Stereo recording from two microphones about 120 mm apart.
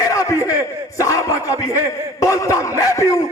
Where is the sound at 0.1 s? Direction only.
25° left (ahead or behind).